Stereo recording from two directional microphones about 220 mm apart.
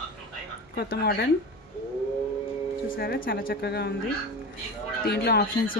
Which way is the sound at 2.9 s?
40° left (ahead or behind).